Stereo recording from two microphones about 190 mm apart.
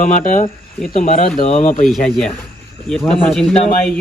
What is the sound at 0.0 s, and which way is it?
Speech, 45° left (ahead or behind).